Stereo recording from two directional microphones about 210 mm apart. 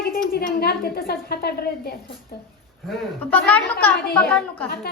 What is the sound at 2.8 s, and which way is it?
A woman's voice, 5° left (ahead or behind).